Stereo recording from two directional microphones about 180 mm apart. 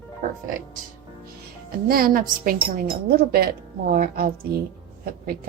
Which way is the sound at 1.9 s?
55° right (ahead or behind).